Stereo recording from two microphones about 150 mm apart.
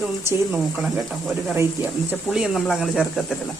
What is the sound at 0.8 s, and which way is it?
Speech, 5° right (ahead or behind).